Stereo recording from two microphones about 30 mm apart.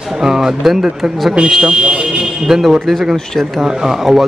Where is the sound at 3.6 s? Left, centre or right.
Right.